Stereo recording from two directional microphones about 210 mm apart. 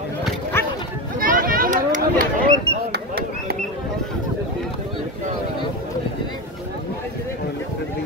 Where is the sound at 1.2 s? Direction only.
40° right (ahead or behind).